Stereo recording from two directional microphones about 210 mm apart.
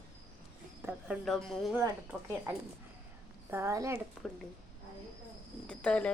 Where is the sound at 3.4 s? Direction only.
10° right (ahead or behind).